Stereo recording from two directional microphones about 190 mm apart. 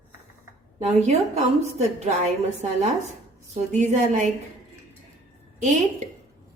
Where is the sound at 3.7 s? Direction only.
40° right (ahead or behind).